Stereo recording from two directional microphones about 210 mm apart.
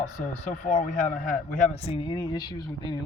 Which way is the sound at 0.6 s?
35° left (ahead or behind).